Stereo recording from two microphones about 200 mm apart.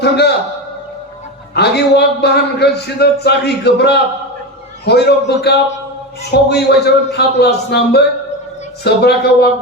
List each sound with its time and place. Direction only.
0.0 s a man's voice: 55° left (ahead or behind)
1.5 s a man's voice: 55° left (ahead or behind)